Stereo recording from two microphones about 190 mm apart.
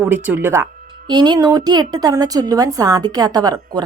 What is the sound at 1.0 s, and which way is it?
A woman's voice, 20° right (ahead or behind).